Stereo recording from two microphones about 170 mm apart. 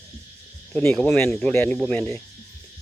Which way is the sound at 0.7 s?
5° left (ahead or behind).